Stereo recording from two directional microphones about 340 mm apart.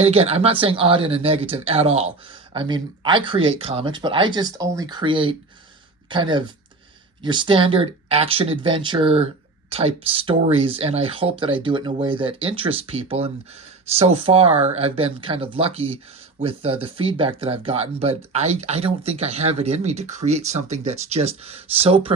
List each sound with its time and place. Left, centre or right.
0.0 s speech: centre